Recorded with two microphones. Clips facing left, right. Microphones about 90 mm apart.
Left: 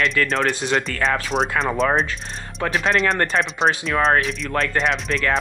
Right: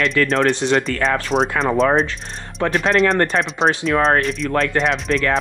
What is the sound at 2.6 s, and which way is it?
Speech, centre (ahead or behind).